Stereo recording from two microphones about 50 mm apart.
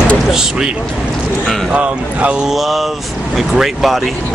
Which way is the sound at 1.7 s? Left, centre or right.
Right.